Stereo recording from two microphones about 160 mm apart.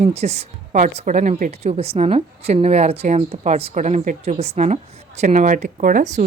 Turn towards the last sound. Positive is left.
turn(degrees=-50)  # may be behind; listen again after turning